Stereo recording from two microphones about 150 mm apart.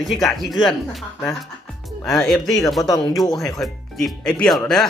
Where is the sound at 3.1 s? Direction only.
Centre (ahead or behind).